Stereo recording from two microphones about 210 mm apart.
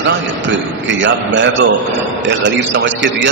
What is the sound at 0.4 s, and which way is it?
A man's voice, 60° right (ahead or behind).